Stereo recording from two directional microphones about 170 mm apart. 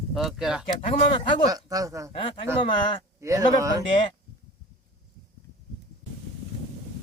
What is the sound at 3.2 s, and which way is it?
Speech, 20° right (ahead or behind).